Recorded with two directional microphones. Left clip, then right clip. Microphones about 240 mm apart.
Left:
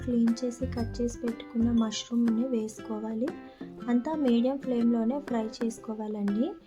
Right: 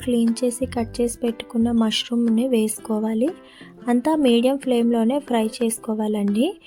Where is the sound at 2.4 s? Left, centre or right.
Right.